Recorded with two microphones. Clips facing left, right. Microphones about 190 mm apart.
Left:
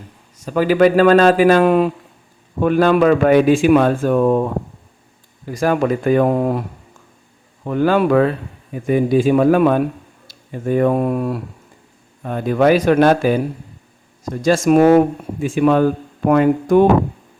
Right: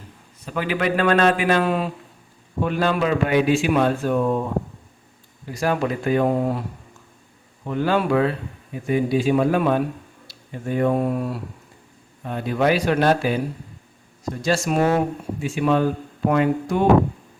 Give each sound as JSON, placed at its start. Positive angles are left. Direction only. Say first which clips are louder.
{"t": 0.4, "sound": "a man's voice", "louder": "left 10 dB", "side_deg": 40}
{"t": 1.6, "sound": "speech", "louder": "left 9 dB", "side_deg": 55}
{"t": 4.1, "sound": "speech", "louder": "left 6 dB", "side_deg": 65}
{"t": 5.5, "sound": "speech", "louder": "left 6 dB", "side_deg": 50}
{"t": 7.6, "sound": "speech", "louder": "left 6 dB", "side_deg": 55}
{"t": 10.2, "sound": "a sound", "louder": "left 7 dB", "side_deg": 50}
{"t": 10.8, "sound": "speech", "louder": "left 4 dB", "side_deg": 65}
{"t": 12.2, "sound": "speech", "louder": "left 6 dB", "side_deg": 50}
{"t": 14.7, "sound": "speech", "louder": "left 11 dB", "side_deg": 65}